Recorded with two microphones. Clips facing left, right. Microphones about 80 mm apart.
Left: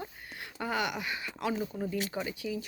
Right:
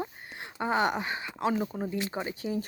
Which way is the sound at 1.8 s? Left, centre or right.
Right.